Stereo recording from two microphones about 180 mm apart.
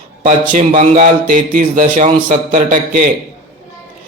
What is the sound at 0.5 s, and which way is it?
A man's voice, 40° right (ahead or behind).